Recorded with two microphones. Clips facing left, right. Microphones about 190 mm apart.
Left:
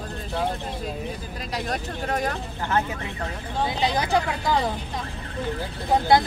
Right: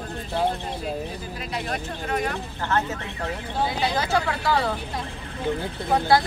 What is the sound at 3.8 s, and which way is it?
Speech, 15° left (ahead or behind).